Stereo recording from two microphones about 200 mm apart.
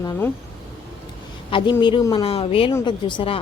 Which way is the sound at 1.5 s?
25° left (ahead or behind).